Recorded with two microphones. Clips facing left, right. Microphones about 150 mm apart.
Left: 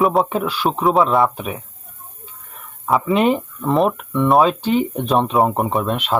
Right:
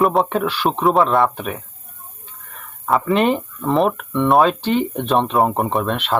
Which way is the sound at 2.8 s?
5° left (ahead or behind).